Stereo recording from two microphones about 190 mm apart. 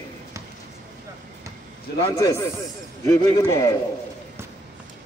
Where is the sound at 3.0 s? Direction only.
15° left (ahead or behind).